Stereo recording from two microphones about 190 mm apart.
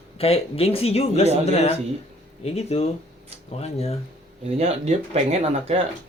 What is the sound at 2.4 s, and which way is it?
Speech, 35° left (ahead or behind).